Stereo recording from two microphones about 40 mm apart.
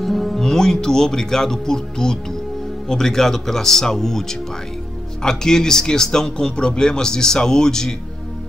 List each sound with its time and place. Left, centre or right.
0.0 s speech: centre